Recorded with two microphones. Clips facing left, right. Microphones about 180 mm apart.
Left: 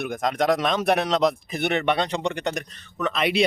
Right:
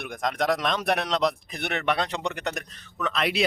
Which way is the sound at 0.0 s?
Centre (ahead or behind).